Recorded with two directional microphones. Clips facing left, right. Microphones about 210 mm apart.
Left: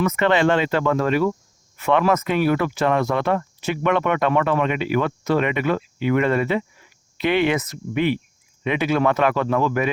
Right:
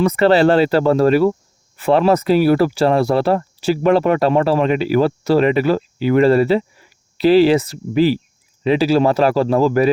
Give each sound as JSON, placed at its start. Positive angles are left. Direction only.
{"t": 0.0, "sound": "speech", "side_deg": -35}